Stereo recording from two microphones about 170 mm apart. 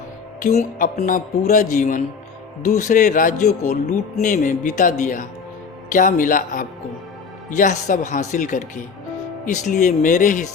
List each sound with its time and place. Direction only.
0.4 s a man's voice: 55° left (ahead or behind)